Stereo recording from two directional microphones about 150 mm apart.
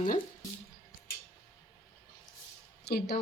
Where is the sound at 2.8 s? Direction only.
90° left.